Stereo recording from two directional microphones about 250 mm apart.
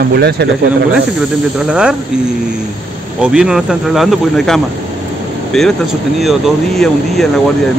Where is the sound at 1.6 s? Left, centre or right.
Centre.